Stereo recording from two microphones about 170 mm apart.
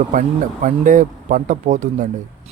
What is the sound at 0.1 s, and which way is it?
Speech, 50° right (ahead or behind).